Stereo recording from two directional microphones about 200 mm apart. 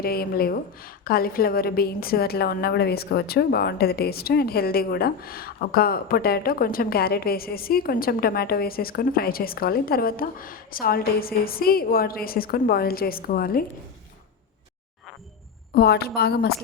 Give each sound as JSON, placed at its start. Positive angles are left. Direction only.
{"t": 0.0, "sound": "a woman's voice", "side_deg": 50}
{"t": 15.7, "sound": "a woman's voice", "side_deg": 50}